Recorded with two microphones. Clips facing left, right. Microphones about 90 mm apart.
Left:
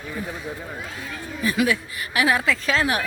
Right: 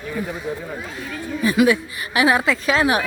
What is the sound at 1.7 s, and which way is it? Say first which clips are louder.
A woman's voice: right 5 dB; 20° right (ahead or behind).